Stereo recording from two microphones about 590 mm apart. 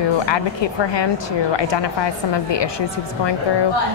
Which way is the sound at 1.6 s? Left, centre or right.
Left.